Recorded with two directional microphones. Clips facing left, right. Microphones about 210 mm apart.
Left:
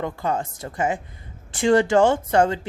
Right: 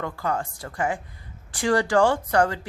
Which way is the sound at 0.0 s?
20° left (ahead or behind).